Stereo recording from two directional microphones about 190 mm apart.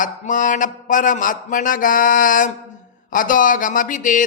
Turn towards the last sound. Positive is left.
turn(degrees=45)  # may be behind; listen again after turning